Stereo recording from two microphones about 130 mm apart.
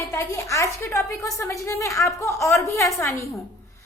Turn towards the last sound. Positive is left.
turn(degrees=20)  # may be behind; listen again after turning